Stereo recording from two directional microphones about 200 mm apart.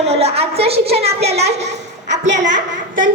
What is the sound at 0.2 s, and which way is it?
Speech, 30° right (ahead or behind).